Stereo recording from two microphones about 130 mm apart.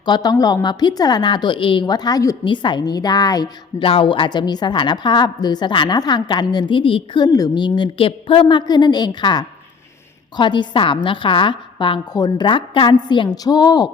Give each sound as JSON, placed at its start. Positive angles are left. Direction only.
{"t": 0.0, "sound": "a woman's voice", "side_deg": 30}
{"t": 3.8, "sound": "a woman's voice", "side_deg": 40}